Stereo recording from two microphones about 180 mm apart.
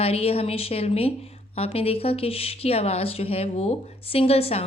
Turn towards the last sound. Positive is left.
turn(degrees=35)  # may be behind; listen again after turning